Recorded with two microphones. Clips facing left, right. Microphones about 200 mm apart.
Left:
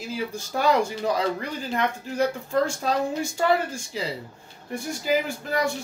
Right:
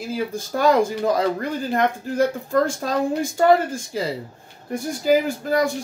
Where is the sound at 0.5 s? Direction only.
50° right (ahead or behind).